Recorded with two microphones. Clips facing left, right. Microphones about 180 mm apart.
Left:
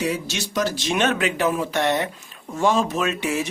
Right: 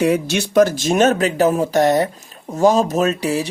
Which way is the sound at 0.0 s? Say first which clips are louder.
Right 8 dB; 55° right (ahead or behind).